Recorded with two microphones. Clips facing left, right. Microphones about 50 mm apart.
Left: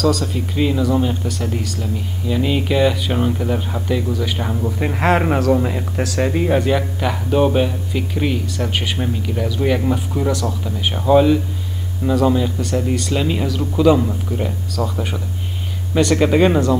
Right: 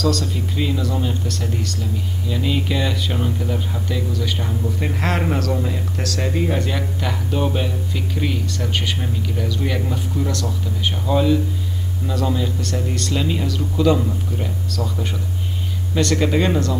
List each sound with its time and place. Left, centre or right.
0.0 s speech: centre